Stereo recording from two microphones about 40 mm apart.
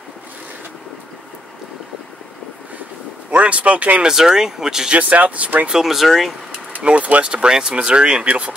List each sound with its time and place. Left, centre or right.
3.3 s a man's voice: right
4.0 s speech: centre
4.9 s speech: right
5.7 s speech: centre
6.8 s speech: right